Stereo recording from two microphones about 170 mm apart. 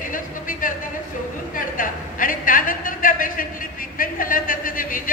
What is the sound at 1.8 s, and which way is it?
Speech, 55° left (ahead or behind).